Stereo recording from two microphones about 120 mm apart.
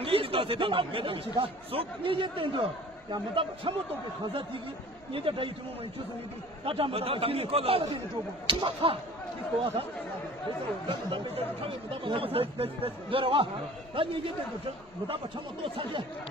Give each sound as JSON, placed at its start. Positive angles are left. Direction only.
{"t": 0.0, "sound": "speech", "side_deg": -50}
{"t": 5.1, "sound": "speech", "side_deg": -50}
{"t": 6.6, "sound": "speech", "side_deg": -50}
{"t": 10.9, "sound": "speech", "side_deg": -50}
{"t": 15.6, "sound": "speech", "side_deg": -50}